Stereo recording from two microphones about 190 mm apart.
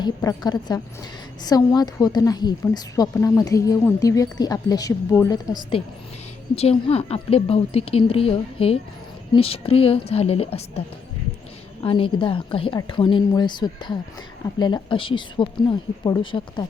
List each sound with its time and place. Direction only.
0.0 s a woman's voice: 20° left (ahead or behind)
5.7 s a woman's voice: 30° left (ahead or behind)